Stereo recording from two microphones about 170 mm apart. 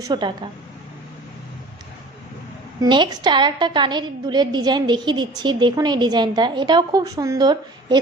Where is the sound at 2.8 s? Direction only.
25° right (ahead or behind).